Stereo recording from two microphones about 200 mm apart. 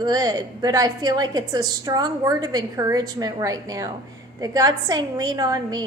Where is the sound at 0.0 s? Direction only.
20° right (ahead or behind).